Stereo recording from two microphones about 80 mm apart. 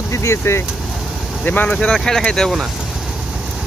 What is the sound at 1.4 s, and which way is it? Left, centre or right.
Speech, centre.